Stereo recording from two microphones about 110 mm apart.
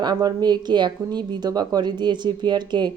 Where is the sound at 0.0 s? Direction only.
40° right (ahead or behind).